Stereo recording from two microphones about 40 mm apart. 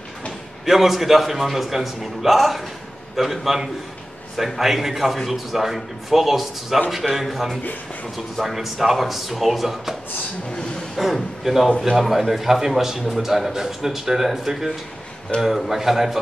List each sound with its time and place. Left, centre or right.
0.7 s a man's voice: centre
11.0 s a man's voice: centre
15.3 s a man's voice: left
15.7 s a man's voice: centre